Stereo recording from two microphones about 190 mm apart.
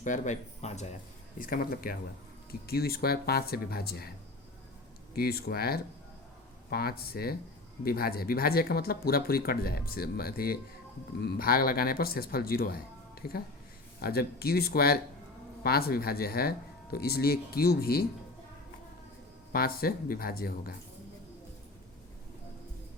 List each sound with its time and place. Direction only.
0.0 s speech: 40° left (ahead or behind)
1.4 s speech: 50° left (ahead or behind)
5.1 s speech: 55° left (ahead or behind)
19.5 s speech: 50° left (ahead or behind)